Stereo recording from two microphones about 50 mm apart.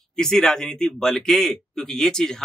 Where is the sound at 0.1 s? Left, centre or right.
Centre.